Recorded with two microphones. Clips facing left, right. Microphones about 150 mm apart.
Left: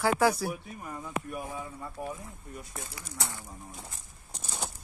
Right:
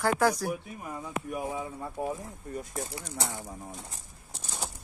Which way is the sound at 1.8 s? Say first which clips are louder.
Right 4 dB; 30° right (ahead or behind).